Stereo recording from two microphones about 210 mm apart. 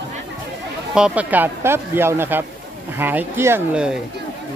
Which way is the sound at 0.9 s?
5° right (ahead or behind).